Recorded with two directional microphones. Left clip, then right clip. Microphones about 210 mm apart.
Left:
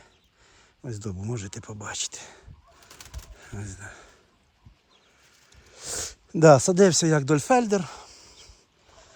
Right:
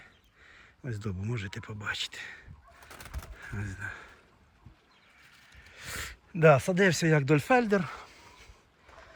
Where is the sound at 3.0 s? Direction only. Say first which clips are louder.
Right 2 dB; 5° left (ahead or behind).